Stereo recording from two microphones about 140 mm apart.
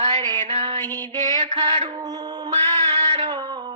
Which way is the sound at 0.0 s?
35° right (ahead or behind).